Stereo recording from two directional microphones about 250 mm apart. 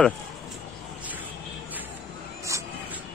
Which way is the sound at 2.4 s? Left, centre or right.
Centre.